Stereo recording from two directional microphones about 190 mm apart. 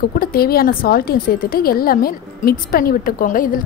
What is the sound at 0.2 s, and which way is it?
A woman's voice, 50° left (ahead or behind).